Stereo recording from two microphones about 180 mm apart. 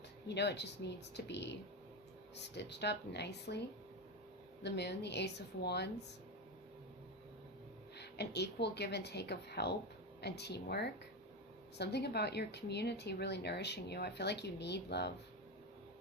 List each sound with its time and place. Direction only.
0.3 s a woman's voice: 70° left (ahead or behind)
4.6 s a woman's voice: 70° left (ahead or behind)
7.9 s a woman's voice: 65° left (ahead or behind)